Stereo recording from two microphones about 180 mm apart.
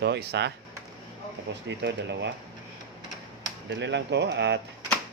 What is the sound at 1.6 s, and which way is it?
Speech, 75° right (ahead or behind).